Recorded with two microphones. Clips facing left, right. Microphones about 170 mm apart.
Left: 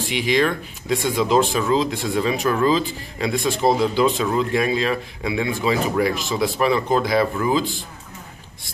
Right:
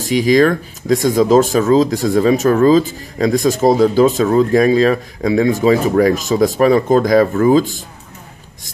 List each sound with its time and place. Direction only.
0.0 s speech: 40° right (ahead or behind)